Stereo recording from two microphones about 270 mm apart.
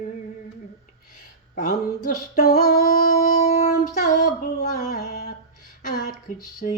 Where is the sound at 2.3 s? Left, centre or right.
Left.